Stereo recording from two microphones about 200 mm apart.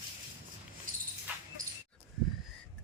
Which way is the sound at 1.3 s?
10° right (ahead or behind).